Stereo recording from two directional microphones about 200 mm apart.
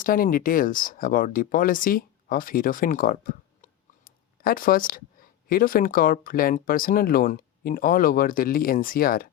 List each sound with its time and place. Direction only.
0.0 s speech: 45° left (ahead or behind)